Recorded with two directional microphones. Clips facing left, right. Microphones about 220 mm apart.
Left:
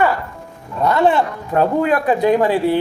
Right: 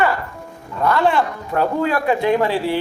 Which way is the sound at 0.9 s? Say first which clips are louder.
Left 2 dB; 20° left (ahead or behind).